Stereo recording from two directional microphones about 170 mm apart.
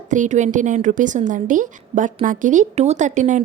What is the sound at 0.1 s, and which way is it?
A woman's voice, 45° right (ahead or behind).